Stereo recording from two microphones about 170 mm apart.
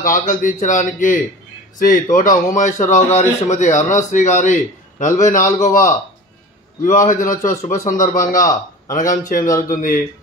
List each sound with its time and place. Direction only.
0.0 s a man's voice: 50° left (ahead or behind)
7.1 s a man's voice: 50° left (ahead or behind)